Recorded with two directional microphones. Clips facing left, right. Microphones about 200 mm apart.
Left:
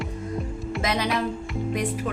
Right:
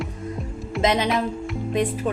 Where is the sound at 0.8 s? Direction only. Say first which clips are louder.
Right 6 dB; 20° right (ahead or behind).